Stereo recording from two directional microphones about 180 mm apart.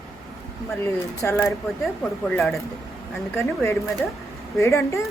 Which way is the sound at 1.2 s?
15° left (ahead or behind).